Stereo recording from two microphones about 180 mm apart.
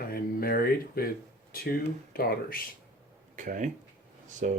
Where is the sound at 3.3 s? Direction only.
45° right (ahead or behind).